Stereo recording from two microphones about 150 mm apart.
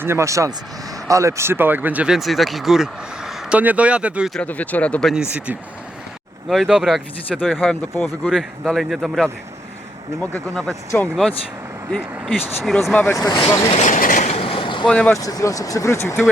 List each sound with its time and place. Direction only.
0.0 s speech: 15° right (ahead or behind)
4.4 s speech: 10° left (ahead or behind)
6.5 s speech: centre (ahead or behind)
13.1 s speech: 25° left (ahead or behind)
13.7 s train: 50° left (ahead or behind); by 14.8 s 35° left (ahead or behind)
14.8 s speech: 5° left (ahead or behind)
15.2 s speech: 25° left (ahead or behind)